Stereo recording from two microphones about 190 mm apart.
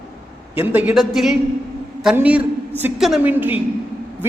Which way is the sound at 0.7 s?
10° right (ahead or behind).